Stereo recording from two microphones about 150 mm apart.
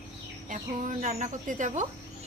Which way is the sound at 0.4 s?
60° right (ahead or behind).